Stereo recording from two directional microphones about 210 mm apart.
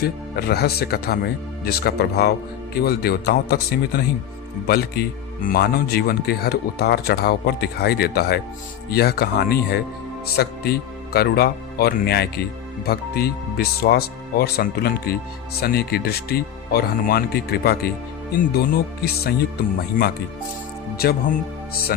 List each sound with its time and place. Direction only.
0.0 s speech: 50° left (ahead or behind)
21.0 s speech: 45° left (ahead or behind)